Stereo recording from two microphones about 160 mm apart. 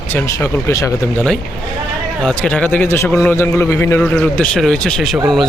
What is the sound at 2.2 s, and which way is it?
A man's voice, 5° left (ahead or behind).